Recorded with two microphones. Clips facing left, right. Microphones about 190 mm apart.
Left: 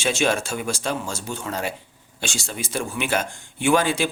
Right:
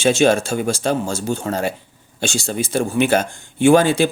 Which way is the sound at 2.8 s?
40° right (ahead or behind).